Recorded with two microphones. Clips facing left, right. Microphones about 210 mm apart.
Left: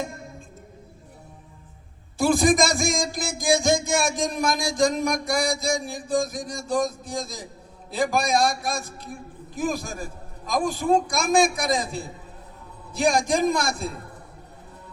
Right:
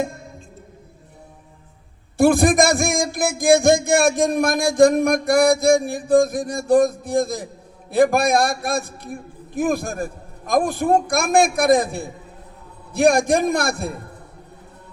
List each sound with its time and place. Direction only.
2.1 s a man's voice: 55° right (ahead or behind)